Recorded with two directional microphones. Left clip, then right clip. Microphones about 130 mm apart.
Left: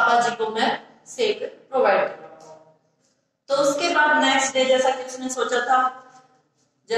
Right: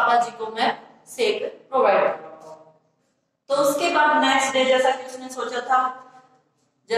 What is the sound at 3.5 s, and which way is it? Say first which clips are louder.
A woman's voice: even; 5° left (ahead or behind).